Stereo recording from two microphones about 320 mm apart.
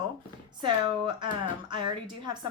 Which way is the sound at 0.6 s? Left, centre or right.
Centre.